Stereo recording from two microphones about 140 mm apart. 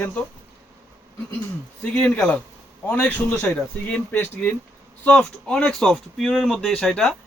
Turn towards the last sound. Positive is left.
turn(degrees=5)  # may be behind; listen again after turning